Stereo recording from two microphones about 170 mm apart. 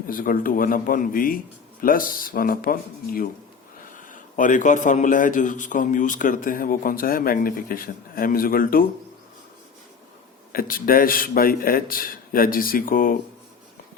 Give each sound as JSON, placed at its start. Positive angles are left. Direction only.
{"t": 0.1, "sound": "a man's voice", "side_deg": 55}
{"t": 10.5, "sound": "a man's voice", "side_deg": 60}